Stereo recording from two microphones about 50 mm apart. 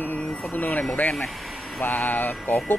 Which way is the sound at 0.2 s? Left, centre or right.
Centre.